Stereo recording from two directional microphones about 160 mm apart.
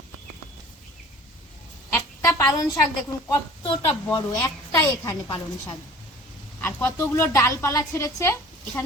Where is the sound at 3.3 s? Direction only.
30° left (ahead or behind).